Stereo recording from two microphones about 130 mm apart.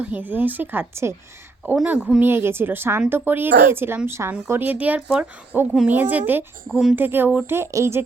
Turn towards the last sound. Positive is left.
turn(degrees=-20)  # may be behind; listen again after turning